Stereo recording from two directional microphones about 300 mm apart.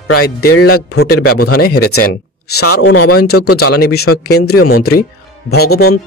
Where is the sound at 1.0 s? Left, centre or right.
Left.